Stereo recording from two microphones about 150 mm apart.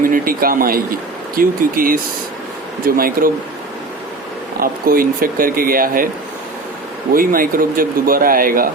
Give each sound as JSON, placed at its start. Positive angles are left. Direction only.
{"t": 0.0, "sound": "speech", "side_deg": -70}
{"t": 4.6, "sound": "speech", "side_deg": -70}
{"t": 7.1, "sound": "speech", "side_deg": -70}